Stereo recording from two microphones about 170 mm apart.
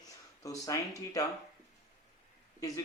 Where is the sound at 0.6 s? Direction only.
20° left (ahead or behind).